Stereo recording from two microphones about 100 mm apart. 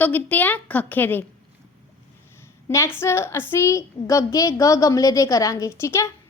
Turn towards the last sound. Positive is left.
turn(degrees=30)  # may be behind; listen again after turning